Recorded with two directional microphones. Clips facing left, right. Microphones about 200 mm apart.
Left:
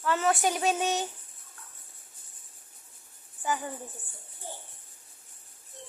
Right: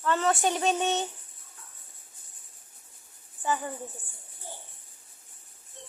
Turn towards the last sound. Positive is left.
turn(degrees=0)  # may be behind; listen again after turning